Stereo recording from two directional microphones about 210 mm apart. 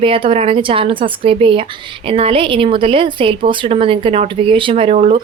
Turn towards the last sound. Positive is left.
turn(degrees=-30)  # may be behind; listen again after turning